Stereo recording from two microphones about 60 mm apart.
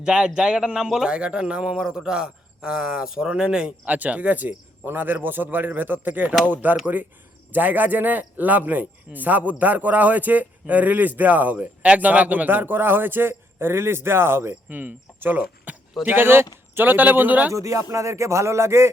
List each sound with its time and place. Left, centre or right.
0.0 s speech: centre
3.8 s a man's voice: right
14.5 s speech: right
16.0 s a man's voice: right
17.5 s speech: right